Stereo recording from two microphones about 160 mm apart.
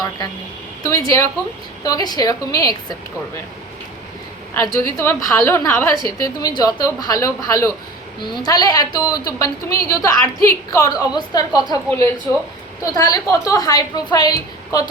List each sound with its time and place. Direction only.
0.8 s a woman's voice: 20° left (ahead or behind)
4.5 s a woman's voice: 20° left (ahead or behind)
12.8 s a woman's voice: 20° left (ahead or behind)